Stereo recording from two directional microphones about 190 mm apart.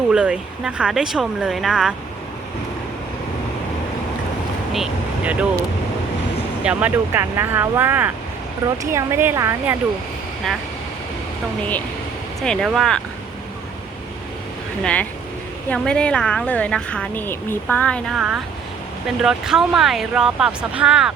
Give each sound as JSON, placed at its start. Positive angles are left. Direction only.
{"t": 0.1, "sound": "a woman's voice", "side_deg": -5}
{"t": 4.7, "sound": "speech", "side_deg": -5}
{"t": 6.6, "sound": "speech", "side_deg": -5}
{"t": 12.4, "sound": "a woman's voice", "side_deg": 0}
{"t": 15.7, "sound": "a woman's voice", "side_deg": 5}